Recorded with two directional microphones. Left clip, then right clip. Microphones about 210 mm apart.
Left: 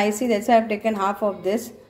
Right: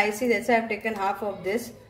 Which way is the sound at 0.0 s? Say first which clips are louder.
Left 2 dB; 35° left (ahead or behind).